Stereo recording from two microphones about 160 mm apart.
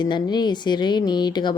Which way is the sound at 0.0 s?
25° left (ahead or behind).